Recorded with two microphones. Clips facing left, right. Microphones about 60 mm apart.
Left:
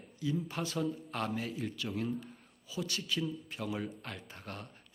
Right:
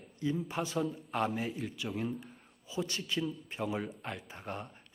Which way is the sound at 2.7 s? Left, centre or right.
Right.